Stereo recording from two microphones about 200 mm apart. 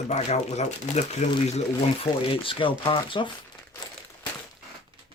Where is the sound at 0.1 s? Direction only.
35° left (ahead or behind).